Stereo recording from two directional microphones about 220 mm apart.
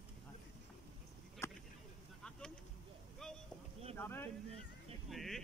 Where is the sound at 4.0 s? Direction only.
10° left (ahead or behind).